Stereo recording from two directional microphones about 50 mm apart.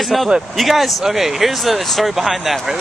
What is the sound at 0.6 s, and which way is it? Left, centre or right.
Speech, centre.